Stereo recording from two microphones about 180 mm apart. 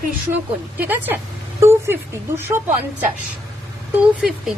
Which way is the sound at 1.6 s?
15° right (ahead or behind).